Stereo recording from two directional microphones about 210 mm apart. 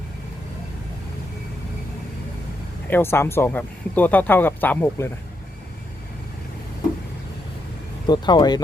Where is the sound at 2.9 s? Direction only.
10° left (ahead or behind).